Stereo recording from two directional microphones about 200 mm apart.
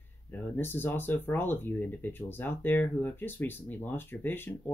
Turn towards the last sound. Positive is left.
turn(degrees=10)  # may be behind; listen again after turning